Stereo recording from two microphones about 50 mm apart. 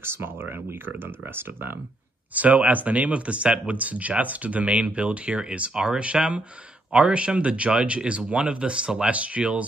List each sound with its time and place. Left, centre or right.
0.0 s speech: right
2.3 s speech: right